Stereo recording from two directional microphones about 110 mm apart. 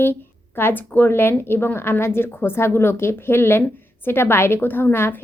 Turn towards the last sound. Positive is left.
turn(degrees=20)  # may be behind; listen again after turning